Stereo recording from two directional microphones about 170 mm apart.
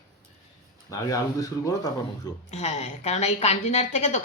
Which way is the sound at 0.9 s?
20° left (ahead or behind).